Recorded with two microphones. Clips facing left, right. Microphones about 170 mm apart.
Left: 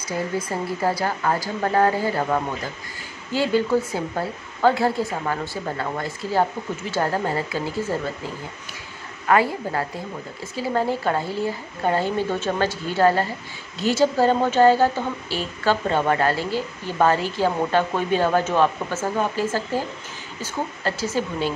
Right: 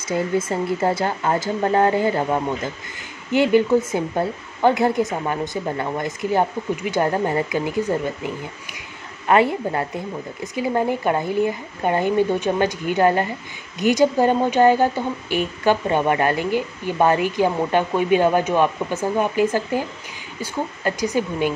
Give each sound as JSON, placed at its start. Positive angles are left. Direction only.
{"t": 0.1, "sound": "a woman's voice", "side_deg": -25}
{"t": 9.3, "sound": "a woman's voice", "side_deg": -25}